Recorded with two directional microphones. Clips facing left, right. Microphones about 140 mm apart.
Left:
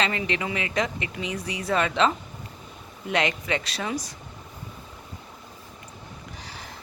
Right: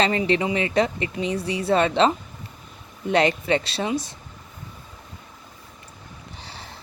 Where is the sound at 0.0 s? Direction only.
35° right (ahead or behind).